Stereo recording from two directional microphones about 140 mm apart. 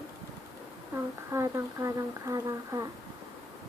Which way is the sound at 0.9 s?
20° right (ahead or behind).